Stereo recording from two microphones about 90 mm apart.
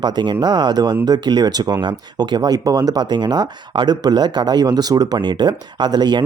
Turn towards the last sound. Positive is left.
turn(degrees=-55)  # may be behind; listen again after turning